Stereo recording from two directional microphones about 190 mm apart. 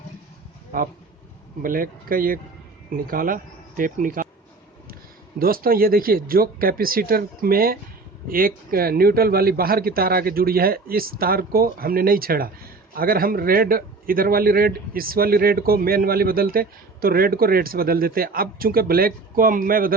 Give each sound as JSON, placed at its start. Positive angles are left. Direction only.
{"t": 1.6, "sound": "a man's voice", "side_deg": -45}
{"t": 5.4, "sound": "a man's voice", "side_deg": -50}